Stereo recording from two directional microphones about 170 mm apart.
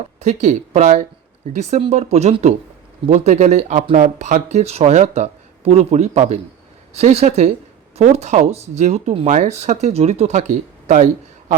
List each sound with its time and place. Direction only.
0.2 s speech: 45° right (ahead or behind)